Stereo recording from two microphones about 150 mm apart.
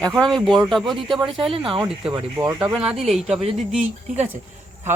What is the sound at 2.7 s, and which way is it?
Speech, 5° right (ahead or behind).